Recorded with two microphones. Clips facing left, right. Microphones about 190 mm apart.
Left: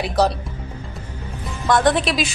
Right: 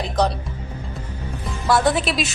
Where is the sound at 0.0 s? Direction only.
10° left (ahead or behind).